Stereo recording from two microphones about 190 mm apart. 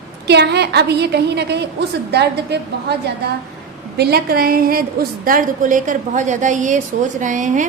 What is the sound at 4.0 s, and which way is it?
A woman's voice, 55° right (ahead or behind).